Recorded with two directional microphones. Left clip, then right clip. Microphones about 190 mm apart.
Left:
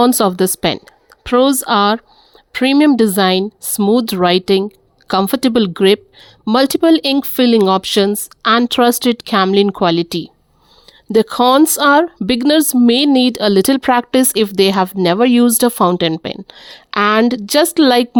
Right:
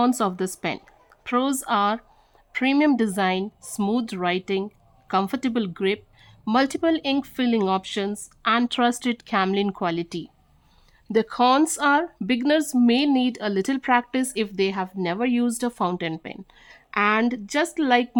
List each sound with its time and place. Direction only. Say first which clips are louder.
0.0 s a woman's voice: left 10 dB; 40° left (ahead or behind)